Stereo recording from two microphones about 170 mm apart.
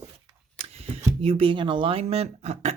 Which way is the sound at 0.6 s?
35° right (ahead or behind).